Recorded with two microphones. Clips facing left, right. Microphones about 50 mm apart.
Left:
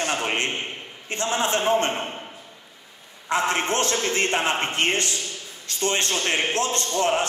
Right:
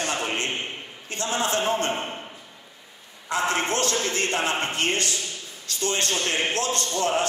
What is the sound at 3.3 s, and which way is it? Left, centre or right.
A man's voice, left.